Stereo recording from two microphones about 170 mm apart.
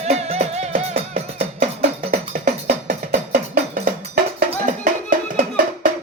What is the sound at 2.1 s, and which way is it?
Music, 55° right (ahead or behind).